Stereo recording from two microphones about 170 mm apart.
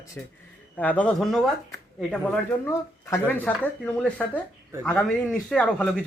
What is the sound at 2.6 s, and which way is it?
A man's voice, 15° left (ahead or behind).